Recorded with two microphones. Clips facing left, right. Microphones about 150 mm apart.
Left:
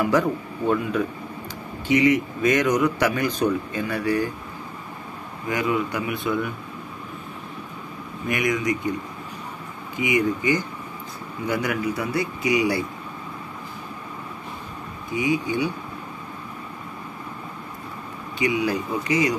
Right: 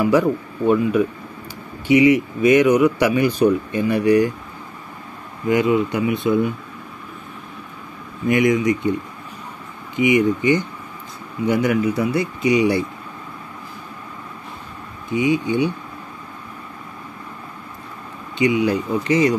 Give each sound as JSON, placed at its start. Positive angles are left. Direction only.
{"t": 0.0, "sound": "speech", "side_deg": -10}
{"t": 5.5, "sound": "speech", "side_deg": -25}
{"t": 8.3, "sound": "speech", "side_deg": -25}
{"t": 9.9, "sound": "speech", "side_deg": -25}
{"t": 15.1, "sound": "speech", "side_deg": -25}
{"t": 18.4, "sound": "speech", "side_deg": -25}